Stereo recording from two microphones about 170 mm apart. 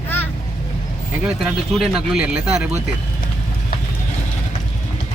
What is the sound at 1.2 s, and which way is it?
Speech, centre (ahead or behind).